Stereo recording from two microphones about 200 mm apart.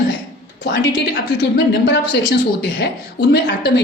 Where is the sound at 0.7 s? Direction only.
55° left (ahead or behind).